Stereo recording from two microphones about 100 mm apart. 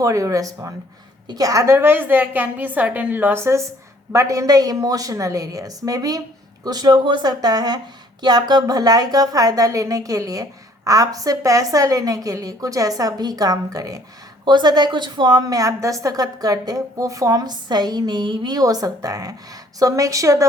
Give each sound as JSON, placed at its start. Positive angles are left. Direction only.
{"t": 0.0, "sound": "a woman's voice", "side_deg": -30}
{"t": 14.4, "sound": "a woman's voice", "side_deg": -50}
{"t": 18.6, "sound": "a woman's voice", "side_deg": -35}